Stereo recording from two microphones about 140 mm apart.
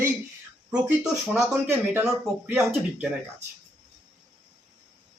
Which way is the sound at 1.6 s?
15° right (ahead or behind).